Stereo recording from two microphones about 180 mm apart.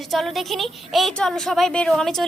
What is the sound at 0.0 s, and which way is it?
A woman's voice, centre (ahead or behind).